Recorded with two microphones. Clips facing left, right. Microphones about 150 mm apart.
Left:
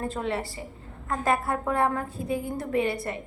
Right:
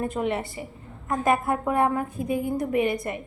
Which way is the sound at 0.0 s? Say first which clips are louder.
Right 3 dB; 20° right (ahead or behind).